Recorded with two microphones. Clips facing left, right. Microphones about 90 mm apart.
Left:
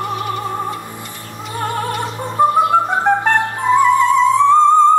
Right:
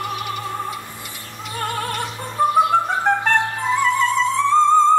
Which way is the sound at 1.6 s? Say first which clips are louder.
Left 4 dB; 15° left (ahead or behind).